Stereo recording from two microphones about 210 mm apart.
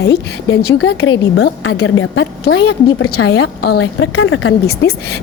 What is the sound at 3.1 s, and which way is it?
A woman's voice, 55° left (ahead or behind).